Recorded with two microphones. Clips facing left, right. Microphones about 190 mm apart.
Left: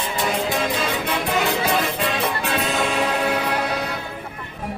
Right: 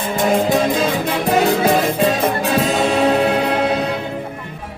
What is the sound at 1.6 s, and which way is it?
Music, 45° right (ahead or behind).